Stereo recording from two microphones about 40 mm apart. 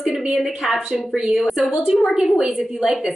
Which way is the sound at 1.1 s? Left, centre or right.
Centre.